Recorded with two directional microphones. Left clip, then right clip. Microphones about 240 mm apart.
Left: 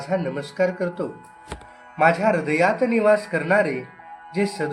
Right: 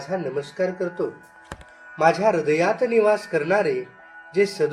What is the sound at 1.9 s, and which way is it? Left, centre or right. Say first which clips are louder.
A man's voice: even; right.